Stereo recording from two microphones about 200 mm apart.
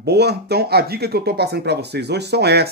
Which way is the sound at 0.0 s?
55° right (ahead or behind).